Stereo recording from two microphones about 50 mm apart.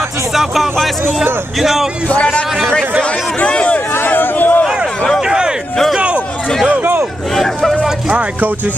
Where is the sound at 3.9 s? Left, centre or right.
Left.